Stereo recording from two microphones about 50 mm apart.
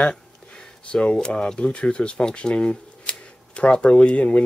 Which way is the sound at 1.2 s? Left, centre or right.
Centre.